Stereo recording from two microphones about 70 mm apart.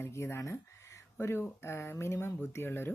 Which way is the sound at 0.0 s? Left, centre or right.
Left.